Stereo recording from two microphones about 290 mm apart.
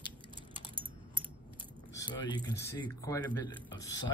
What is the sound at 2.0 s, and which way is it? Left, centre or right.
Speech, centre.